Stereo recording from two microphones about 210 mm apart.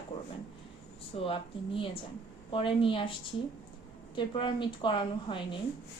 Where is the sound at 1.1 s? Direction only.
30° left (ahead or behind).